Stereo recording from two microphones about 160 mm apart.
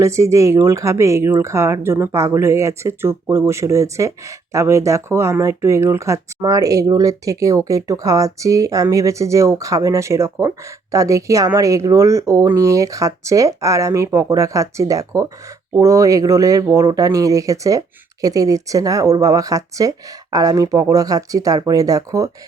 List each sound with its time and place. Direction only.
0.0 s speech: 20° right (ahead or behind)